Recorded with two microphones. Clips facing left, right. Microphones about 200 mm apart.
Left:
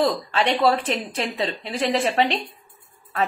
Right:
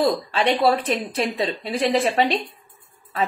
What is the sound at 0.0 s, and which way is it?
Speech, 15° right (ahead or behind).